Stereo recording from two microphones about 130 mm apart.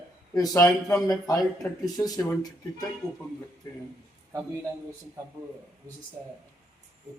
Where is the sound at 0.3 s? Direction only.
25° left (ahead or behind).